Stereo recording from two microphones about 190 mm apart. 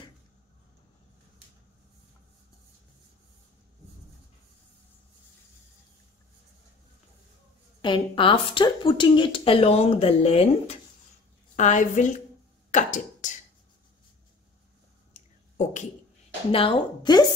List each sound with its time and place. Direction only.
7.8 s a woman's voice: 25° left (ahead or behind); by 13.3 s 40° left (ahead or behind)
15.1 s a sound: 40° left (ahead or behind)
16.5 s speech: 30° left (ahead or behind)